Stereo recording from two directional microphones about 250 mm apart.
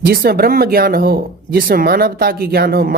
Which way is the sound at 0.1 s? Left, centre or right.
Right.